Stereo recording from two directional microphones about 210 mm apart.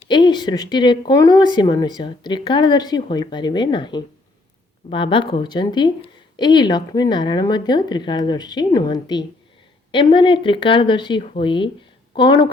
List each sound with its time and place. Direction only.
0.1 s speech: 20° left (ahead or behind)